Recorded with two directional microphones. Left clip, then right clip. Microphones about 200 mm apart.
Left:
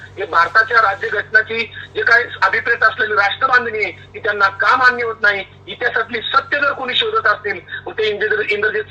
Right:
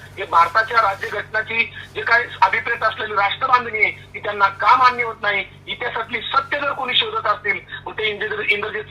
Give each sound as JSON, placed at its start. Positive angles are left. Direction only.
{"t": 0.6, "sound": "speech", "side_deg": 15}